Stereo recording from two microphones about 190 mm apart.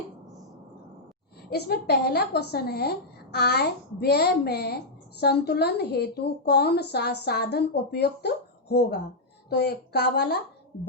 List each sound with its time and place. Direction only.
1.5 s a woman's voice: 55° left (ahead or behind)
9.5 s a woman's voice: 60° left (ahead or behind)